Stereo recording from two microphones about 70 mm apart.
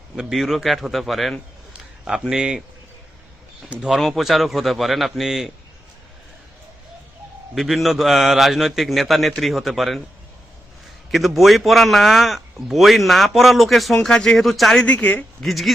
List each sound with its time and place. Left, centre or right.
0.2 s a man's voice: centre
3.8 s a man's voice: centre
7.5 s a man's voice: centre
11.1 s a man's voice: centre
14.8 s speech: left
15.4 s a man's voice: centre